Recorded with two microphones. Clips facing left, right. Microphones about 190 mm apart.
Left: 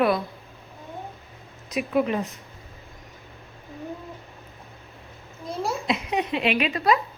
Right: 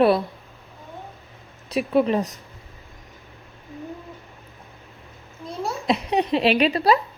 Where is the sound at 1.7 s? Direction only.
30° right (ahead or behind).